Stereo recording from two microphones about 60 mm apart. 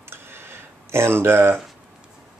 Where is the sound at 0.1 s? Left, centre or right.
Right.